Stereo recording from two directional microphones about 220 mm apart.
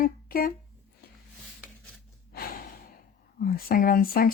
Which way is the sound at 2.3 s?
40° left (ahead or behind).